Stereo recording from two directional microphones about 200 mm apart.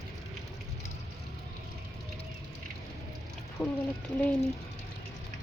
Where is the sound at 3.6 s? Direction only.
10° left (ahead or behind).